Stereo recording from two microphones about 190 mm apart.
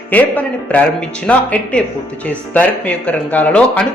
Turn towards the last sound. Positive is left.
turn(degrees=10)  # may be behind; listen again after turning